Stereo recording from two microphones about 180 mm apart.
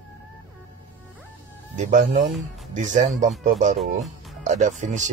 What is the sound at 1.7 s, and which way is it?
Speech, 45° right (ahead or behind).